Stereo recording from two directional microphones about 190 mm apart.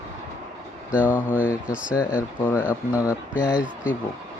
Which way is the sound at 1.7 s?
5° right (ahead or behind).